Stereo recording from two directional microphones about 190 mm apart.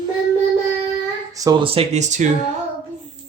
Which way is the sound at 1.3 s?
20° right (ahead or behind).